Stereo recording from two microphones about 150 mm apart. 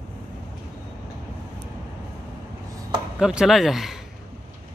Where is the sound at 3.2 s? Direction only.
5° right (ahead or behind).